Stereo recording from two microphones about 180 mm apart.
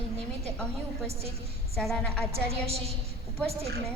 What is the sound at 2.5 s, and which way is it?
Speech, 35° right (ahead or behind).